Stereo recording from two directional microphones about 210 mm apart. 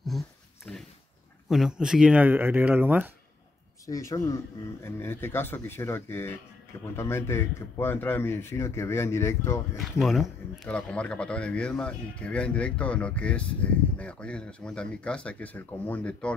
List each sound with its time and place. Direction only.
0.7 s dog: 5° left (ahead or behind)
1.5 s speech: 5° right (ahead or behind)
3.8 s speech: 15° left (ahead or behind)
9.8 s speech: centre (ahead or behind)